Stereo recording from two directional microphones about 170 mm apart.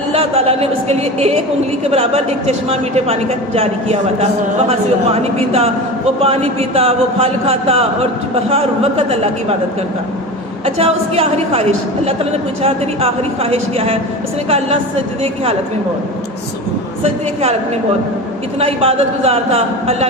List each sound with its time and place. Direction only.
0.1 s a woman's voice: 35° right (ahead or behind)
5.2 s a woman's voice: 35° right (ahead or behind)
10.8 s a woman's voice: 35° right (ahead or behind)
18.6 s a woman's voice: 35° right (ahead or behind)